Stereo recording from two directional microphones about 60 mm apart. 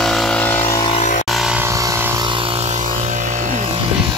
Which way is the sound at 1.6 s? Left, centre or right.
Right.